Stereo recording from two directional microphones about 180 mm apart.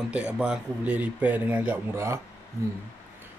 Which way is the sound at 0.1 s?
5° right (ahead or behind).